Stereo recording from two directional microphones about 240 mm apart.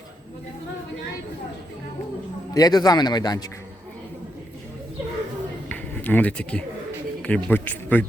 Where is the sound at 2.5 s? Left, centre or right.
Centre.